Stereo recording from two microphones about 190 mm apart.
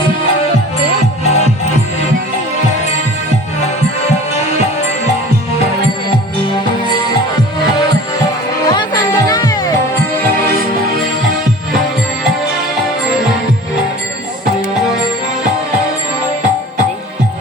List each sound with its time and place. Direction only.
1.2 s music: 35° left (ahead or behind)
8.7 s music: 20° left (ahead or behind)